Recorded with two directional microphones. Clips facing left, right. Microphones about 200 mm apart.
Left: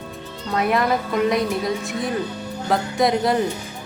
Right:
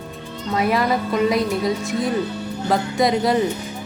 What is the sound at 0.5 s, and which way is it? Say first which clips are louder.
Speech: right 1 dB; centre (ahead or behind).